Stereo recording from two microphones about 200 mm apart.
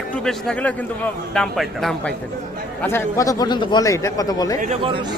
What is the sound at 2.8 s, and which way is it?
A man's voice, 10° left (ahead or behind).